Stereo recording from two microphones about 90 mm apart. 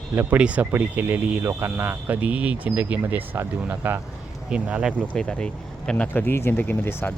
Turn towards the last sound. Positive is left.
turn(degrees=25)  # may be behind; listen again after turning